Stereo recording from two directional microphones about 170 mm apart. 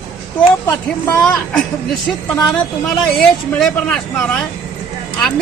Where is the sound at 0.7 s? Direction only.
5° left (ahead or behind).